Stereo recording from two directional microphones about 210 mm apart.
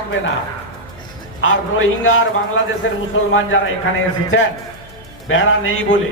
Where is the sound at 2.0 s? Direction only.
70° left (ahead or behind).